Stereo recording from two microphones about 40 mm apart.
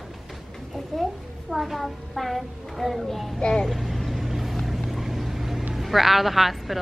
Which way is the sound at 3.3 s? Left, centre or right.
Centre.